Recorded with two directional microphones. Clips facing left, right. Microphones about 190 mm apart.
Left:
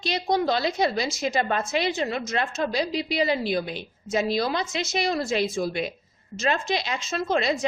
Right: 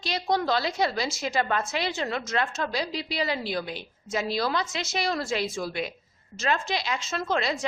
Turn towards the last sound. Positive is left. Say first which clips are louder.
# left 3 dB
turn(degrees=20)  # may be behind; listen again after turning